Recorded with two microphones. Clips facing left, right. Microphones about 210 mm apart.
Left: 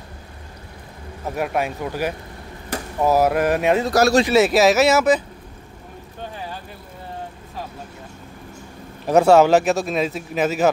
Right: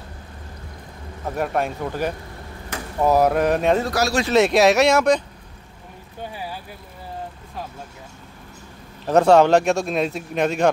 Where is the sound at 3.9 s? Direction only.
45° left (ahead or behind).